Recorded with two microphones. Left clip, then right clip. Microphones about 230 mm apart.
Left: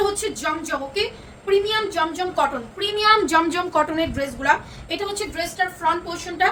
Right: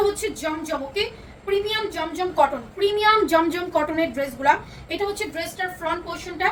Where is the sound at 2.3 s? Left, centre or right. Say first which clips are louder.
Right 2 dB; centre.